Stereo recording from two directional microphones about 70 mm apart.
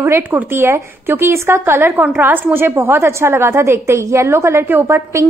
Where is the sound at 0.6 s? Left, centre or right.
Right.